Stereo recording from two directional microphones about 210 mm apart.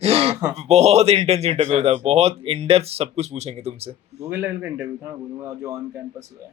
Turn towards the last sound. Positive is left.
turn(degrees=-15)  # may be behind; listen again after turning